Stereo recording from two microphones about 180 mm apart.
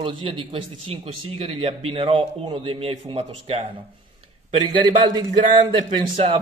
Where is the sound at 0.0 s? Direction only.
30° right (ahead or behind).